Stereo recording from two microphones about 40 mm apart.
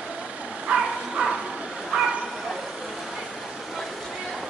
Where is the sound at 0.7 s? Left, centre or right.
Right.